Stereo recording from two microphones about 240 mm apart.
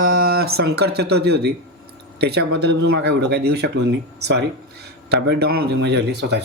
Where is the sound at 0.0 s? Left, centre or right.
Right.